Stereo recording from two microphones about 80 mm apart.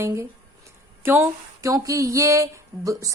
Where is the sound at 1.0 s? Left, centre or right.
Right.